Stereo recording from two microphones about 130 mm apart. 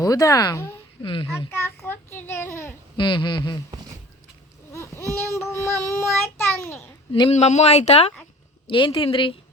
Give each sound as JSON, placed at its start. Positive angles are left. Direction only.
{"t": 0.0, "sound": "a child's voice", "side_deg": 25}
{"t": 1.0, "sound": "speech", "side_deg": 45}
{"t": 1.3, "sound": "a child's voice", "side_deg": 20}
{"t": 3.0, "sound": "speech", "side_deg": 40}
{"t": 4.7, "sound": "a sound", "side_deg": 20}
{"t": 5.1, "sound": "a child's voice", "side_deg": 20}
{"t": 7.1, "sound": "speech", "side_deg": 45}
{"t": 7.3, "sound": "speech", "side_deg": 60}
{"t": 8.6, "sound": "speech", "side_deg": 40}